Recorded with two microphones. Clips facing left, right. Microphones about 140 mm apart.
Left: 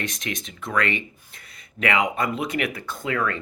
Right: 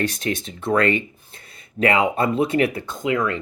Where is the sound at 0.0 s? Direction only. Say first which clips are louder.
Right 7 dB; 35° right (ahead or behind).